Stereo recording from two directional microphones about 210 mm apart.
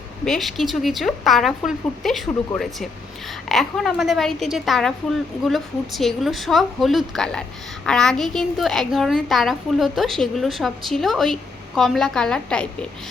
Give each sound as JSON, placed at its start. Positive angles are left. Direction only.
{"t": 0.3, "sound": "a woman's voice", "side_deg": 0}
{"t": 2.5, "sound": "speech", "side_deg": 20}
{"t": 3.5, "sound": "a woman's voice", "side_deg": 0}